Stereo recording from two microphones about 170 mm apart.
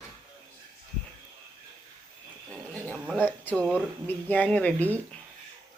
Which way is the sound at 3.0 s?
5° right (ahead or behind).